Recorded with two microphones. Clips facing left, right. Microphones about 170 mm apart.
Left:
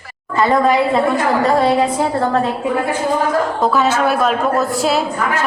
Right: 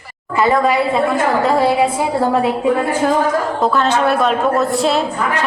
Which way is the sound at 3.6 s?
5° left (ahead or behind).